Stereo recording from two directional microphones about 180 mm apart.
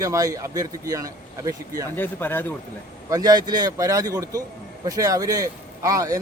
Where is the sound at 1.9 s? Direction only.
10° left (ahead or behind).